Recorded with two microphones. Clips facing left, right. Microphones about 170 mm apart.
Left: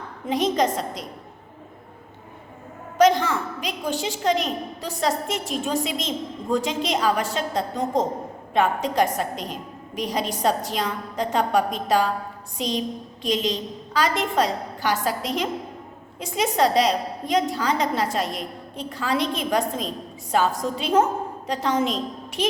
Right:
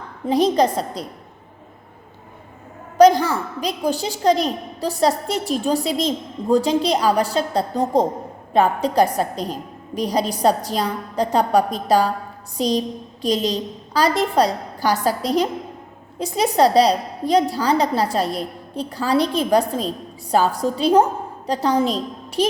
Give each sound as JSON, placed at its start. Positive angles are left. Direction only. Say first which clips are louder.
{"t": 0.3, "sound": "a woman's voice", "louder": "right 5 dB", "side_deg": -35}
{"t": 3.0, "sound": "a woman's voice", "louder": "right 5 dB", "side_deg": -35}